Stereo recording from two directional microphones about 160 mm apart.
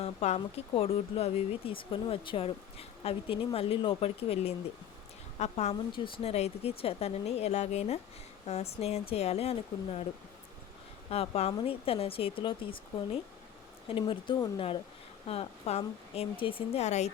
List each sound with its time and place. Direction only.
0.0 s a woman's voice: 40° left (ahead or behind)
11.1 s speech: 40° left (ahead or behind)
13.9 s speech: 30° left (ahead or behind)